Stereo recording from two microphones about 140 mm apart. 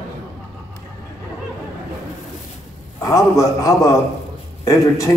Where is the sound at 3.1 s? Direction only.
25° left (ahead or behind).